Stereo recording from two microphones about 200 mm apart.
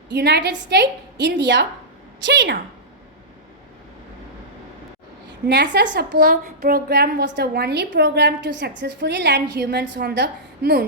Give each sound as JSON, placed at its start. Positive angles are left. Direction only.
{"t": 0.1, "sound": "a woman's voice", "side_deg": -55}
{"t": 5.5, "sound": "a woman's voice", "side_deg": -60}